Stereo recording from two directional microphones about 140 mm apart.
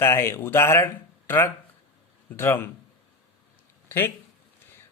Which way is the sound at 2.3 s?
15° left (ahead or behind).